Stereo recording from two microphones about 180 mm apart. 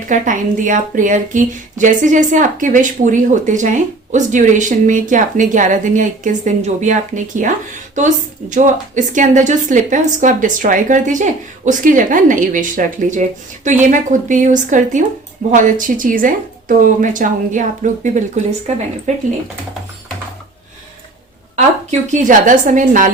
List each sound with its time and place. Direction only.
0.1 s speech: 45° right (ahead or behind)
21.5 s speech: 40° right (ahead or behind)